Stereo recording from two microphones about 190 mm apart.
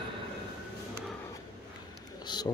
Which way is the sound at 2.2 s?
20° left (ahead or behind).